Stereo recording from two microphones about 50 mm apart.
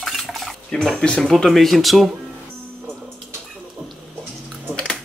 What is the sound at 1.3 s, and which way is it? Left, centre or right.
Speech, centre.